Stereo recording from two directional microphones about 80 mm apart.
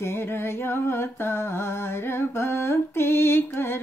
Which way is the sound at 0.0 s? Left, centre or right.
Left.